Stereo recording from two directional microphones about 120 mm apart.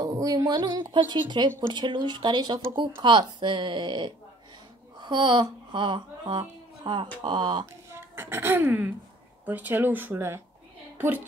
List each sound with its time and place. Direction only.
0.0 s speech: 30° right (ahead or behind)
7.9 s a woman's voice: 20° right (ahead or behind)